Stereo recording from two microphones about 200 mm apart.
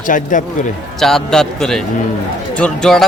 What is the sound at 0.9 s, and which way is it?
Speech, centre (ahead or behind).